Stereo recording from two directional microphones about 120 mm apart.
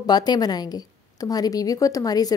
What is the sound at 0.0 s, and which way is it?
A woman's voice, 35° left (ahead or behind).